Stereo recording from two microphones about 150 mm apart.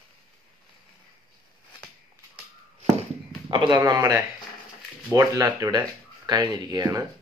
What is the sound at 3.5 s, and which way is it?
Speech, 30° right (ahead or behind).